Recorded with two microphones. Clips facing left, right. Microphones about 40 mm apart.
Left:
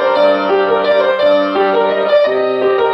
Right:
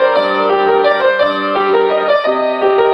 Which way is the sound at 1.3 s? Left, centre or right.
Centre.